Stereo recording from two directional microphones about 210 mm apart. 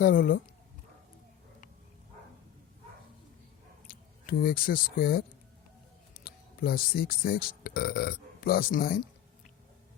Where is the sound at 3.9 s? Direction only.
45° left (ahead or behind).